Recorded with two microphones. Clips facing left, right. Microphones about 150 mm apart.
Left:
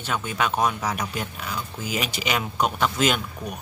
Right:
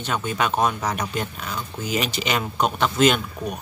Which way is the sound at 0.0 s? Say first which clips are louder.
Right 2 dB; 5° left (ahead or behind).